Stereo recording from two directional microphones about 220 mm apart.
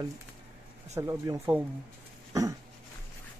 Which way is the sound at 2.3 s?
15° right (ahead or behind).